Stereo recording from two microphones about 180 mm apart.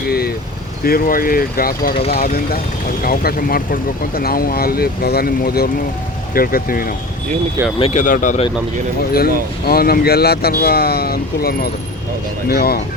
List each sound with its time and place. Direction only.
0.1 s vehicle: 60° left (ahead or behind)
0.9 s speech: 55° left (ahead or behind)
7.8 s speech: 40° left (ahead or behind)
9.6 s speech: 55° left (ahead or behind)